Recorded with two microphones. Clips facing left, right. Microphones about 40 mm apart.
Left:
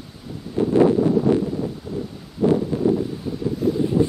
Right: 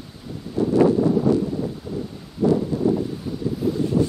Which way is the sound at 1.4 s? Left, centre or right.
Centre.